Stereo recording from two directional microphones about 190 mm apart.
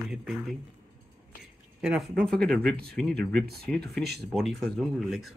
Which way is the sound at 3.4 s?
55° right (ahead or behind).